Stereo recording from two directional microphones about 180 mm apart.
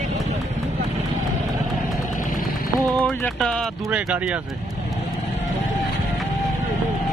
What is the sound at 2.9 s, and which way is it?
Speech, 5° left (ahead or behind).